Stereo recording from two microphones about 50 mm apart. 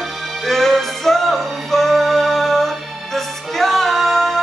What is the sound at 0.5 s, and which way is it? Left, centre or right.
Music, centre.